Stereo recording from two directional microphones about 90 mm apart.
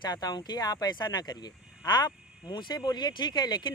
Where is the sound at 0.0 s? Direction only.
45° left (ahead or behind).